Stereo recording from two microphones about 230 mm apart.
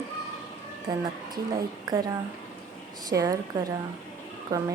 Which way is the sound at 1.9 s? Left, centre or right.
Centre.